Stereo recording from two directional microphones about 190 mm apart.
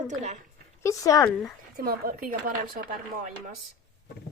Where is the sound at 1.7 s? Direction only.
50° right (ahead or behind).